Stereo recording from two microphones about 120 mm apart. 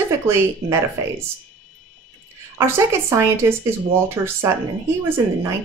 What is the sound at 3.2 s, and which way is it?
Speech, 20° right (ahead or behind).